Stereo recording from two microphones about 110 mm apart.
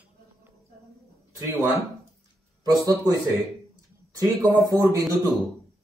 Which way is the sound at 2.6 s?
35° right (ahead or behind).